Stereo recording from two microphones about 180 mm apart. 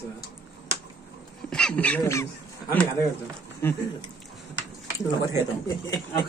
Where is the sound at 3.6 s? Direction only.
10° left (ahead or behind).